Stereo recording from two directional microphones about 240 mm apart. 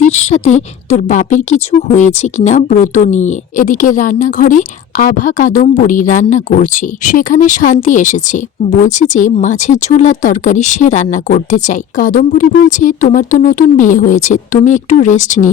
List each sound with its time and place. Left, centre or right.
0.0 s speech: left